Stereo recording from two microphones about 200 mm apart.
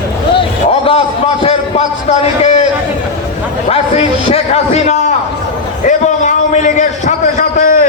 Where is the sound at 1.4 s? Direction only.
30° left (ahead or behind).